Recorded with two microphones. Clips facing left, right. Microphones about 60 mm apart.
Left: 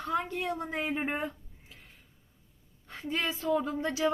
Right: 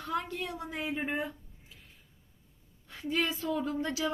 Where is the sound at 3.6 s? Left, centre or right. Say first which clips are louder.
Left 2 dB; centre.